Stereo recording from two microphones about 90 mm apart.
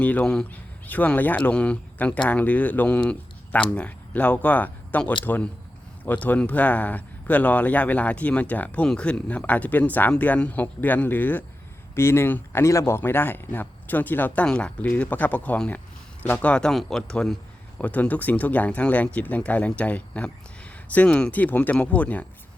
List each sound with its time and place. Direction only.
0.0 s speech: 15° left (ahead or behind)